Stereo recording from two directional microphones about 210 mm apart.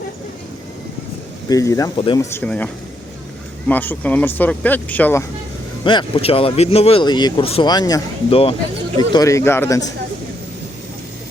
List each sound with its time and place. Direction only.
1.5 s speech: 15° left (ahead or behind)
2.3 s speech: 5° left (ahead or behind)
3.7 s speech: 10° left (ahead or behind)
5.8 s speech: 25° left (ahead or behind)